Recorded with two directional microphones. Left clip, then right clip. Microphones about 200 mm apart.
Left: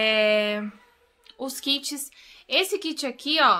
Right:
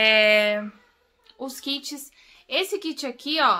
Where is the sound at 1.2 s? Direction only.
20° left (ahead or behind).